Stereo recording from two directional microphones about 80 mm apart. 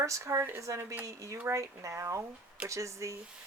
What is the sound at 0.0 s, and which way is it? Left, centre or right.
Speech, right.